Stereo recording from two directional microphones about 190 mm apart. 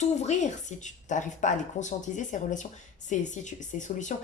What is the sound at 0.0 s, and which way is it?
A woman's voice, 35° left (ahead or behind).